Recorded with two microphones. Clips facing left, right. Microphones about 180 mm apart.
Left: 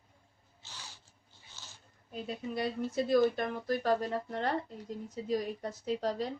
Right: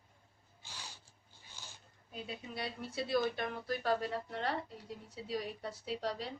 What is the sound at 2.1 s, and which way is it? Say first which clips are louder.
Speech: left 7 dB; 45° left (ahead or behind).